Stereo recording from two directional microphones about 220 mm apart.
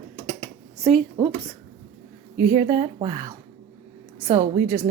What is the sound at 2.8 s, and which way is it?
Speech, 35° right (ahead or behind).